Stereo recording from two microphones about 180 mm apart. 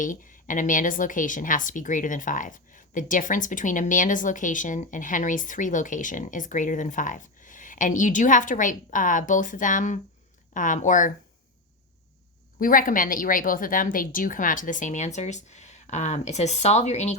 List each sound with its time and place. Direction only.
0.0 s speech: 45° left (ahead or behind)
12.5 s speech: 50° left (ahead or behind)